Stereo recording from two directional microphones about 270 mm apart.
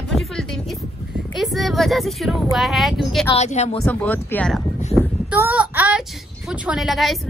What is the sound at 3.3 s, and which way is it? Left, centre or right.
Speech, left.